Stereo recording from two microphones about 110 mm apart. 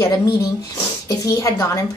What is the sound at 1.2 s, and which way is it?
Speech, 30° left (ahead or behind).